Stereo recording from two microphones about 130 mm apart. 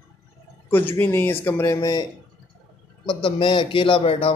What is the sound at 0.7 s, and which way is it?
A man's voice, 15° left (ahead or behind).